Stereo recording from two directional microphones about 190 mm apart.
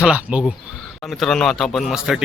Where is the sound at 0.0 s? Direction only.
5° right (ahead or behind).